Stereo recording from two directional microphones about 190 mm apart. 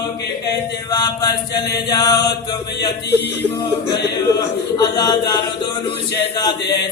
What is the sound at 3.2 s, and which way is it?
Speech, 10° left (ahead or behind).